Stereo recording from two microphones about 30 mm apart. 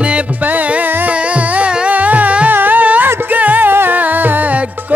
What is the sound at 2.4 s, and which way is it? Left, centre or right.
Music, right.